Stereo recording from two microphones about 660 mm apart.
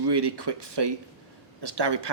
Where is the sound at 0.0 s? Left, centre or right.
Right.